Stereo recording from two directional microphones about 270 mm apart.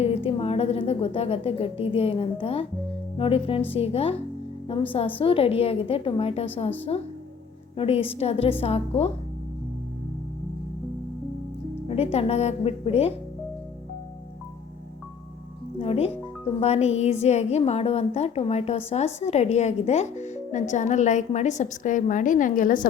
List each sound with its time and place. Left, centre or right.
0.0 s a woman's voice: centre
5.2 s speech: left
11.9 s speech: left
15.8 s speech: left